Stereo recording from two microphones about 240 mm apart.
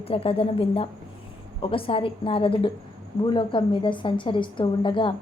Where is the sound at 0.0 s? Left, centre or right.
Left.